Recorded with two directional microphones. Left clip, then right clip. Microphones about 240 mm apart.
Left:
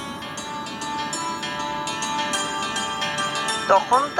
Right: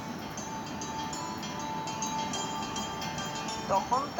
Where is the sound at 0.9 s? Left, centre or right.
Centre.